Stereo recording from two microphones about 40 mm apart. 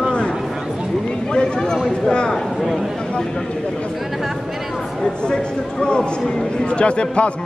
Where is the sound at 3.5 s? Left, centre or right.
Left.